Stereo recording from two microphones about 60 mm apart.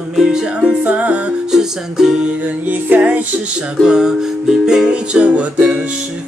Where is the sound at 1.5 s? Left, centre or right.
Centre.